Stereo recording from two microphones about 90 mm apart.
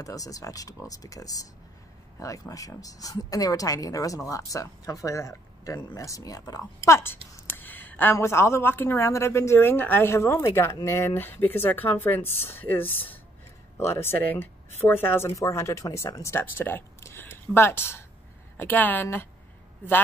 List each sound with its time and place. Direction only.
0.0 s a woman's voice: 40° left (ahead or behind)
7.4 s a sound: 20° left (ahead or behind)
8.2 s speech: 30° left (ahead or behind)